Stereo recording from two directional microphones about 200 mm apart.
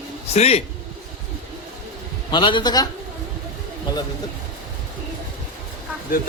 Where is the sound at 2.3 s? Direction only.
25° left (ahead or behind).